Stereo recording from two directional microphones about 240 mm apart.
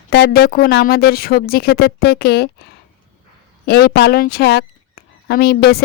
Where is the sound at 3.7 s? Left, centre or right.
Left.